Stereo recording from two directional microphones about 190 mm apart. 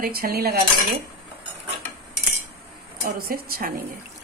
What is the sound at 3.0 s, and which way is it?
Speech, 50° right (ahead or behind).